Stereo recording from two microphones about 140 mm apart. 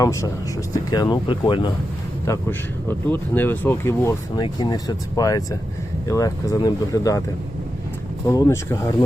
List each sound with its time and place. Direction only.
0.0 s speech: 20° left (ahead or behind)
2.2 s speech: 20° left (ahead or behind)
4.4 s speech: 35° left (ahead or behind)
8.2 s speech: 25° left (ahead or behind)